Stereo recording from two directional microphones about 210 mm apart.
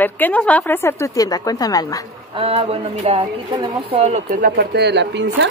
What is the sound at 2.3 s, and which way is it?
Speech, 25° right (ahead or behind).